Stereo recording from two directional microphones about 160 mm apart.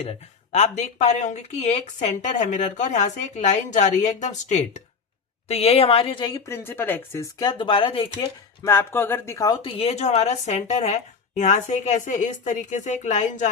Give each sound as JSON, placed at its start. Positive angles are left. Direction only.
{"t": 0.0, "sound": "a woman's voice", "side_deg": 40}
{"t": 8.6, "sound": "a woman's voice", "side_deg": 15}